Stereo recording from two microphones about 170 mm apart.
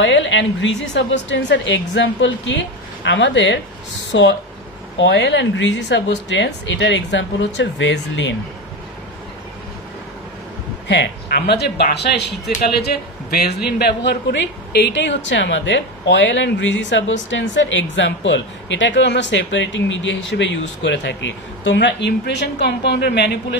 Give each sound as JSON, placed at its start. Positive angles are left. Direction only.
{"t": 0.0, "sound": "a woman's voice", "side_deg": 90}
{"t": 10.9, "sound": "a woman's voice", "side_deg": 80}